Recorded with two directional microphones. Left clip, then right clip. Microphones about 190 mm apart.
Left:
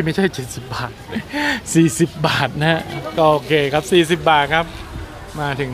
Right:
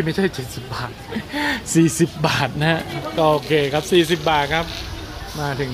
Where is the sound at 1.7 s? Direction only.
5° left (ahead or behind).